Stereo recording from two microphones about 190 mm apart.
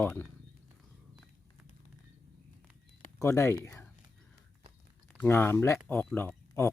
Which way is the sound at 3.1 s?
15° left (ahead or behind).